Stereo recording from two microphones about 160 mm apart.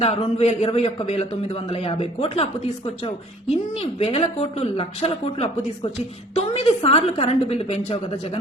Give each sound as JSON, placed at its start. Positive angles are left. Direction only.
{"t": 0.0, "sound": "speech", "side_deg": 40}
{"t": 3.8, "sound": "speech", "side_deg": 40}